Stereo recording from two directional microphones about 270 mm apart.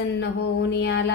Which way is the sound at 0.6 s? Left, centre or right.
Left.